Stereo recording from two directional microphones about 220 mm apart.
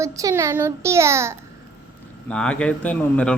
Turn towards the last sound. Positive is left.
turn(degrees=5)  # may be behind; listen again after turning